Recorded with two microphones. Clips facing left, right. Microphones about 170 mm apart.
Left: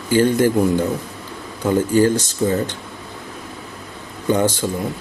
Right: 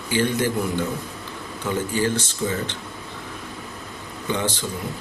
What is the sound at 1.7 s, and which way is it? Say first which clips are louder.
Speech: left 8 dB; 40° left (ahead or behind).